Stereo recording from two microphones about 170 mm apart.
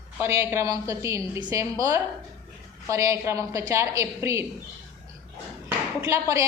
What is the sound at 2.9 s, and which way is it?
A woman's voice, 15° right (ahead or behind).